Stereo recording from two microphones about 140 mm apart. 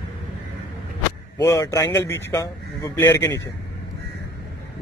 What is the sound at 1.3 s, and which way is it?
A man's voice, 25° left (ahead or behind).